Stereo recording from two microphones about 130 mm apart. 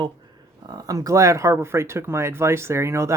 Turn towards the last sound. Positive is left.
turn(degrees=-20)  # may be behind; listen again after turning